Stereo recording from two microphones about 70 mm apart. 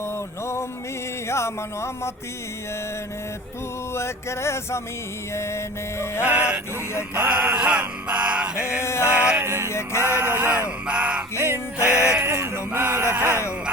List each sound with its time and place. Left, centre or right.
1.3 s music: left
3.9 s music: left
6.2 s music: centre
7.1 s mantra: right
8.8 s music: left
9.1 s music: centre
9.4 s speech: right
9.6 s music: left
10.2 s speech: right
10.5 s music: centre
12.2 s speech: right